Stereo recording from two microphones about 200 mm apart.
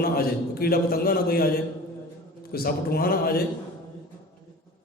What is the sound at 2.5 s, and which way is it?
Speech, 50° left (ahead or behind).